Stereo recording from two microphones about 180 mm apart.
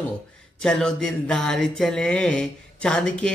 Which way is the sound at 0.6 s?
5° left (ahead or behind).